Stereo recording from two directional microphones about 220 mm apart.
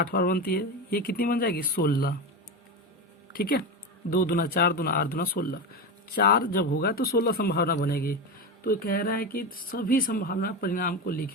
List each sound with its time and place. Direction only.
0.0 s speech: 40° left (ahead or behind)
3.3 s speech: 40° left (ahead or behind)